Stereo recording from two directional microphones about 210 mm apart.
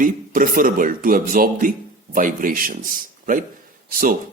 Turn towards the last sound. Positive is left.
turn(degrees=-40)  # may be behind; listen again after turning